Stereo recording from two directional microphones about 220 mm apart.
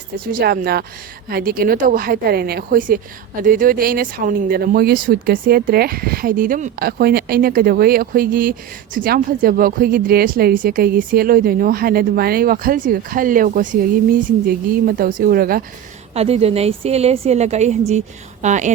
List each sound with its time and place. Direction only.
0.3 s speech: 40° right (ahead or behind)
16.1 s a woman's voice: 30° right (ahead or behind)